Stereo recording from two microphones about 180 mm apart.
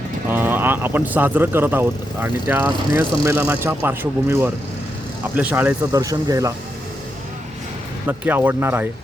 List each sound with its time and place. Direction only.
0.3 s speech: 10° right (ahead or behind)
8.0 s speech: 10° right (ahead or behind)